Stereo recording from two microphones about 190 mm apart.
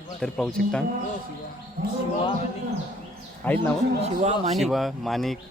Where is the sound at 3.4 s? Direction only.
10° left (ahead or behind).